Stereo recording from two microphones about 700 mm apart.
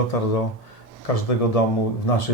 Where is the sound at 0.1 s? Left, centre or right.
Left.